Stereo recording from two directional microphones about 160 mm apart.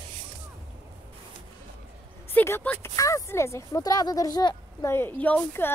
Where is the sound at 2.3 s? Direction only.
10° left (ahead or behind).